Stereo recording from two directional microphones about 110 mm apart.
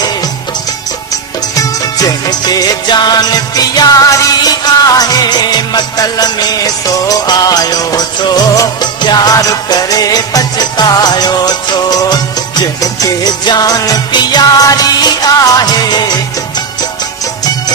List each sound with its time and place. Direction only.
2.5 s music: 40° left (ahead or behind)